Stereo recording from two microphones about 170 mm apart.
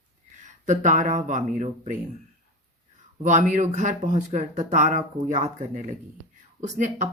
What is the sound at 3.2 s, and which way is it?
Speech, 45° right (ahead or behind).